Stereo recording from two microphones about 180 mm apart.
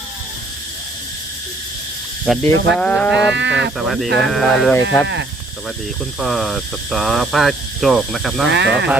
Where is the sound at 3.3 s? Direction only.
80° right.